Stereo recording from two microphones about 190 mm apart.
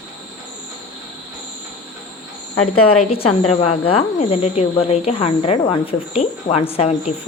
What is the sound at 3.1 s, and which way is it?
Speech, 30° left (ahead or behind).